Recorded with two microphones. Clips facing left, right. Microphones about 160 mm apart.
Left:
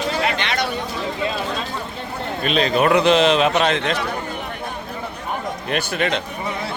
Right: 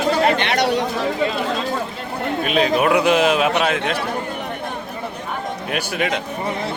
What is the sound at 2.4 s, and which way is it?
A man's voice, 10° right (ahead or behind).